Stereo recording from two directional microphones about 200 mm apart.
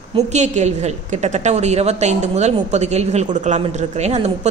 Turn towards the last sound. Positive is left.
turn(degrees=-35)  # may be behind; listen again after turning